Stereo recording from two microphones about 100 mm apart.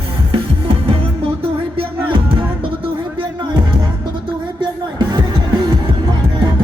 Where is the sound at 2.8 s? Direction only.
60° right (ahead or behind).